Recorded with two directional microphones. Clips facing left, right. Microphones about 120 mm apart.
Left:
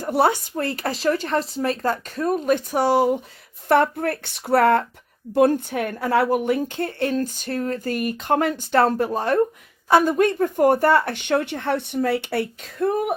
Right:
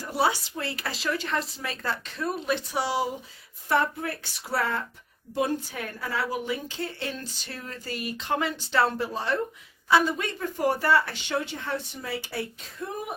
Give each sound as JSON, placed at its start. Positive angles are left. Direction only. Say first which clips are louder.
{"t": 0.0, "sound": "a woman's voice", "louder": "left 6 dB", "side_deg": 55}
{"t": 1.0, "sound": "speech", "louder": "left 7 dB", "side_deg": 35}
{"t": 1.4, "sound": "speech", "louder": "left 8 dB", "side_deg": 0}
{"t": 1.8, "sound": "a woman's voice", "louder": "left 8 dB", "side_deg": 45}